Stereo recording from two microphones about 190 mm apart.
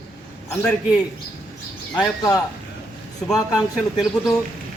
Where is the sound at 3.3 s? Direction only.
20° left (ahead or behind).